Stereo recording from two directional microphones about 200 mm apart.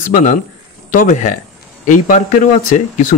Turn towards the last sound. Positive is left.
turn(degrees=40)  # may be behind; listen again after turning